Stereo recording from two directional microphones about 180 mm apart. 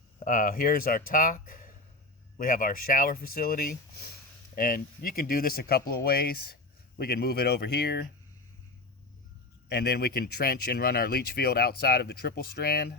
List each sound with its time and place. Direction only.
0.3 s speech: 50° left (ahead or behind)
9.6 s speech: 60° left (ahead or behind)